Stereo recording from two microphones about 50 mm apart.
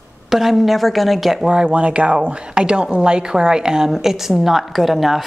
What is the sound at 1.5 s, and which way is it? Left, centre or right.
A woman's voice, right.